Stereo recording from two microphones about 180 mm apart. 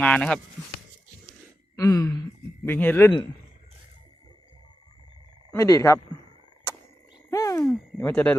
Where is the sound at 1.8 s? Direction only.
20° left (ahead or behind).